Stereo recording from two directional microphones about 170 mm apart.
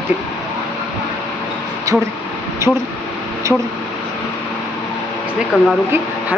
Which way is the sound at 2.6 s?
15° right (ahead or behind).